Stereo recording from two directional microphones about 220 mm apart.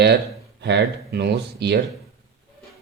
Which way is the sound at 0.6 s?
50° right (ahead or behind).